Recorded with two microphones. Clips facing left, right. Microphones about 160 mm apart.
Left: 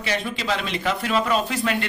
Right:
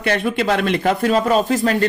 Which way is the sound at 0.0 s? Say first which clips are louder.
Right 8 dB; 55° right (ahead or behind).